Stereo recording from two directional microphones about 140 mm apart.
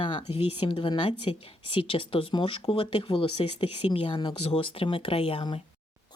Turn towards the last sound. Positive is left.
turn(degrees=40)  # may be behind; listen again after turning